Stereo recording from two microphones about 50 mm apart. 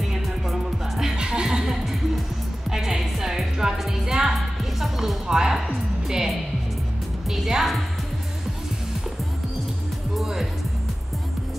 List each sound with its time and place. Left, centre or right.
0.5 s music: centre
7.2 s a woman's voice: centre
10.1 s music: centre